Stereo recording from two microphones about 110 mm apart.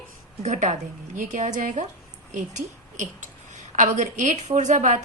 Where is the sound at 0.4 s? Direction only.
90° right.